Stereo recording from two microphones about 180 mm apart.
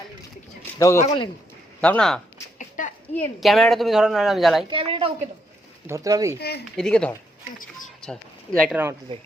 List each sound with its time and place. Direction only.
0.8 s a man's voice: 15° left (ahead or behind)
1.0 s a man's voice: 30° left (ahead or behind)
1.8 s a woman's voice: 5° left (ahead or behind)
2.6 s a sound: 45° left (ahead or behind)
3.2 s a woman's voice: centre (ahead or behind)
4.7 s a woman's voice: 30° right (ahead or behind)
5.9 s speech: 20° right (ahead or behind)
6.7 s a woman's voice: 5° left (ahead or behind)
8.7 s speech: 10° right (ahead or behind)